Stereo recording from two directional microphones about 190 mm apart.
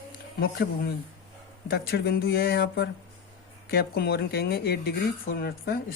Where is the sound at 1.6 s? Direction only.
55° left (ahead or behind).